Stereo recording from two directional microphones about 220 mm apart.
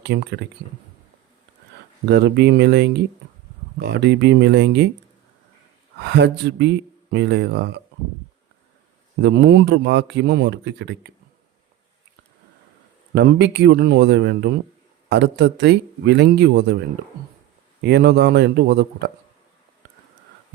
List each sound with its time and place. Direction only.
0.0 s speech: 50° right (ahead or behind)
2.0 s speech: 50° right (ahead or behind)
6.0 s speech: 50° right (ahead or behind)
9.2 s speech: 50° right (ahead or behind)
13.1 s speech: 50° right (ahead or behind)
17.8 s speech: 50° right (ahead or behind)